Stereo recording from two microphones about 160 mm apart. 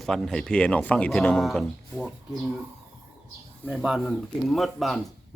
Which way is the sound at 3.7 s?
5° right (ahead or behind).